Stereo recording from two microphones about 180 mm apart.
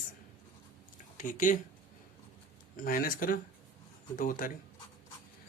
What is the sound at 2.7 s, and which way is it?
Speech, 50° left (ahead or behind).